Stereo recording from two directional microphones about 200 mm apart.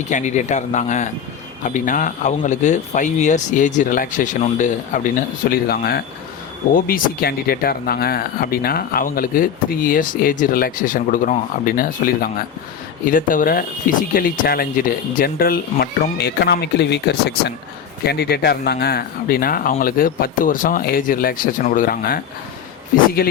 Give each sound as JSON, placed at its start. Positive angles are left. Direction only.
{"t": 0.1, "sound": "speech", "side_deg": 35}
{"t": 23.2, "sound": "speech", "side_deg": 45}